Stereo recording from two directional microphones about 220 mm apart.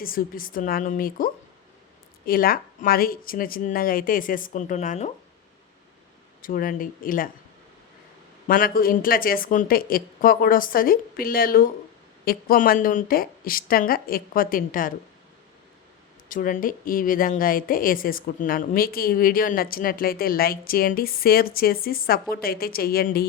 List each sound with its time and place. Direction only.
0.0 s a woman's voice: 40° left (ahead or behind)
6.4 s a woman's voice: 40° left (ahead or behind)
8.4 s a woman's voice: 40° left (ahead or behind)
16.3 s a woman's voice: 40° left (ahead or behind)